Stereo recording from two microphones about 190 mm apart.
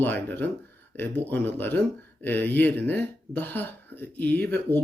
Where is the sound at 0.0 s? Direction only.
10° left (ahead or behind).